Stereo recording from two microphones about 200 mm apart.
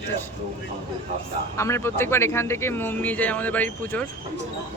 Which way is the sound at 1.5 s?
15° left (ahead or behind).